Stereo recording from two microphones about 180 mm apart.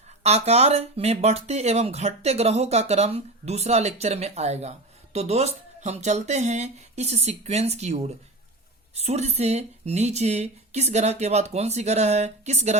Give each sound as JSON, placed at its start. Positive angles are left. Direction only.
{"t": 0.2, "sound": "speech", "side_deg": -35}